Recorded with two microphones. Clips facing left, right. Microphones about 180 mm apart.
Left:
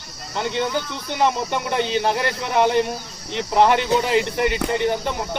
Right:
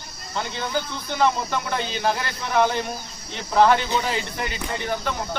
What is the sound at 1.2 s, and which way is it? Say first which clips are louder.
Speech: left 1 dB; 20° left (ahead or behind).